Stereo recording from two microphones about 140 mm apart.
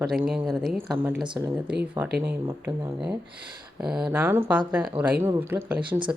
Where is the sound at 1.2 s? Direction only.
35° right (ahead or behind).